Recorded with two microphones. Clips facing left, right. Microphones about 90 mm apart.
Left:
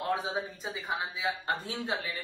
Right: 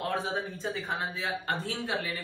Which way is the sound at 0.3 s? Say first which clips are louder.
Right 2 dB; 5° left (ahead or behind).